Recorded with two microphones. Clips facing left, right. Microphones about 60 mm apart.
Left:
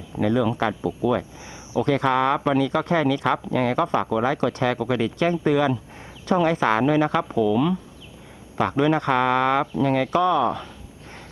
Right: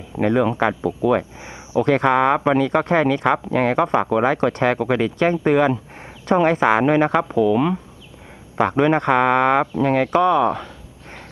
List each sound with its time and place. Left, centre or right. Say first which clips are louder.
0.2 s speech: right 3 dB; right
7.3 s speech: right 3 dB; right
8.5 s speech: right 3 dB; right